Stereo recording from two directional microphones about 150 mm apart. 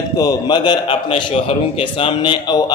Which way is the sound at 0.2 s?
30° left (ahead or behind).